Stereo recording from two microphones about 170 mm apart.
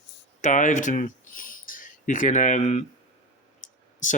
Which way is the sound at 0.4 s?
50° left (ahead or behind).